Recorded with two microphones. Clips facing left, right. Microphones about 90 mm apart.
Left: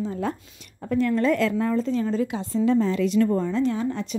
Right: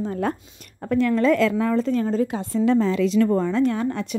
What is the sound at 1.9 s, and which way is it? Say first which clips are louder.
Speech: right 2 dB; 45° right (ahead or behind).